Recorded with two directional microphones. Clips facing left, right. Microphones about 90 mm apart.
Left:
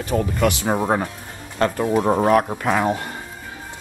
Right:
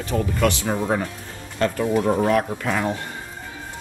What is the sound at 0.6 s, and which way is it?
Speech, 40° left (ahead or behind).